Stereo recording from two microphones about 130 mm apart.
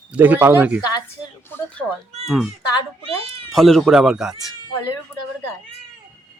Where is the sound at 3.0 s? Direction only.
50° right (ahead or behind).